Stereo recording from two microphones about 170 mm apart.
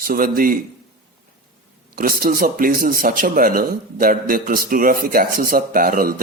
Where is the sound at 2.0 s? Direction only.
60° right (ahead or behind).